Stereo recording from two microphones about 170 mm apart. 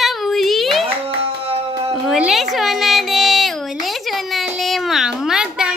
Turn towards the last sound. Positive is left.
turn(degrees=-5)  # may be behind; listen again after turning